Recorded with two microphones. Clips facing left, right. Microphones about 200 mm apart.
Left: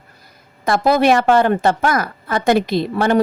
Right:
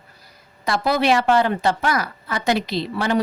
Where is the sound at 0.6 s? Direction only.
50° left (ahead or behind).